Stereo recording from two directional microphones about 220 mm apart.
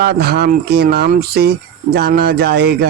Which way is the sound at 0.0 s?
45° right (ahead or behind).